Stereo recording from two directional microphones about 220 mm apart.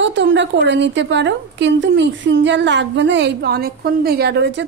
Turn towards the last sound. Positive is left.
turn(degrees=-55)  # may be behind; listen again after turning